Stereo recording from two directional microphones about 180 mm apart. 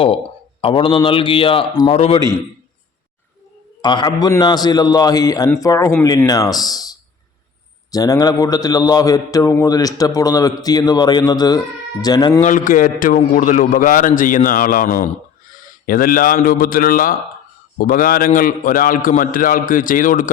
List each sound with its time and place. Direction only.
0.6 s a man's voice: 30° left (ahead or behind)
3.8 s a man's voice: 25° left (ahead or behind)
7.9 s a man's voice: 20° left (ahead or behind)
12.4 s a man's voice: 45° left (ahead or behind)